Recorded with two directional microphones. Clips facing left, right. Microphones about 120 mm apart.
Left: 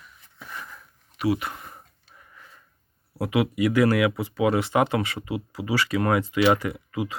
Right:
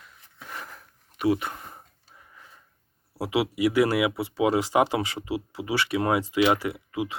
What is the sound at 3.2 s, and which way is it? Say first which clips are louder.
Speech: left 1 dB; 10° right (ahead or behind).